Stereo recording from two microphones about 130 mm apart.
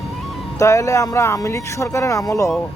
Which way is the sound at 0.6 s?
25° left (ahead or behind).